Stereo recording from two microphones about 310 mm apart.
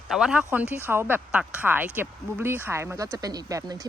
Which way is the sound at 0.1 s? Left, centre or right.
Centre.